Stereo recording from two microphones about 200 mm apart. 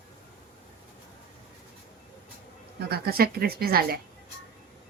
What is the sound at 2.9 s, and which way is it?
A woman's voice, 50° right (ahead or behind).